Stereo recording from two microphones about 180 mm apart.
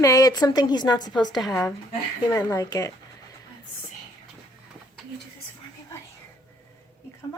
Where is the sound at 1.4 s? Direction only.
Centre (ahead or behind).